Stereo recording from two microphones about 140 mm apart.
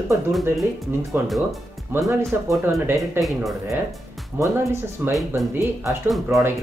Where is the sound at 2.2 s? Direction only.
20° right (ahead or behind).